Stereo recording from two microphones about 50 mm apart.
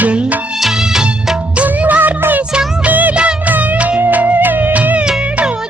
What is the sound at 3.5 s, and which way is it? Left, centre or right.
Music, right.